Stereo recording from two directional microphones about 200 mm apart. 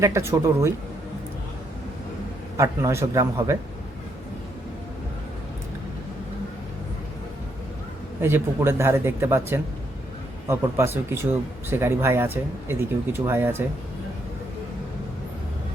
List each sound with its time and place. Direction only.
0.0 s speech: 15° right (ahead or behind)
2.6 s speech: 15° right (ahead or behind)
8.2 s speech: 10° right (ahead or behind)